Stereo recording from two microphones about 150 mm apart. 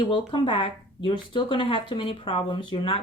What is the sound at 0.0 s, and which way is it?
Speech, 30° left (ahead or behind).